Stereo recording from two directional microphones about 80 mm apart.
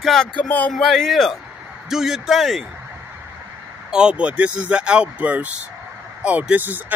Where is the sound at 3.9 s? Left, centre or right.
Centre.